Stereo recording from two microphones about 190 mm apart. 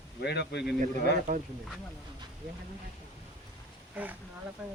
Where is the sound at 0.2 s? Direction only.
60° left (ahead or behind).